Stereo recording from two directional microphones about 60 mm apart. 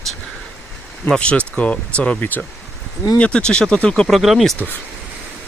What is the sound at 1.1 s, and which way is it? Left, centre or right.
Speech, centre.